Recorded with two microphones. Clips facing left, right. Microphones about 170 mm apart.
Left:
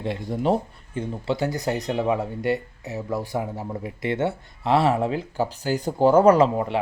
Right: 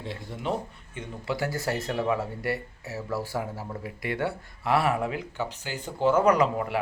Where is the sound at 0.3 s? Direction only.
40° left (ahead or behind).